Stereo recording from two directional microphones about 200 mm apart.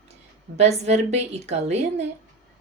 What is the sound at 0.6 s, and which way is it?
A woman's voice, 35° right (ahead or behind).